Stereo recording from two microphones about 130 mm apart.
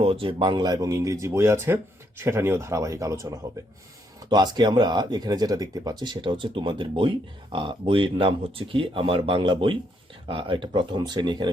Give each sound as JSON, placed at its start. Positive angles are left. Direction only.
{"t": 0.0, "sound": "speech", "side_deg": -45}